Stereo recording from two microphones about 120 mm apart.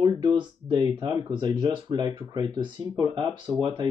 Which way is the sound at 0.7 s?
35° right (ahead or behind).